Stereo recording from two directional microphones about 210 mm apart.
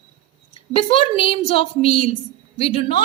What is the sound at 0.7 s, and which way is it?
A woman's voice, 25° left (ahead or behind).